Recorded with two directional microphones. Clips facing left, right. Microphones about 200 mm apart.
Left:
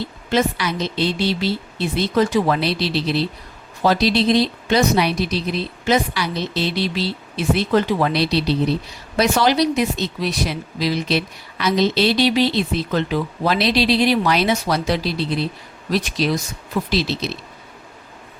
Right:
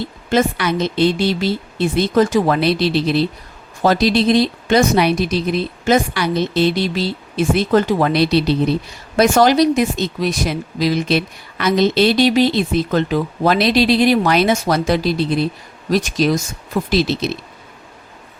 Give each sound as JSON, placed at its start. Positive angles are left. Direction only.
{"t": 0.3, "sound": "speech", "side_deg": -50}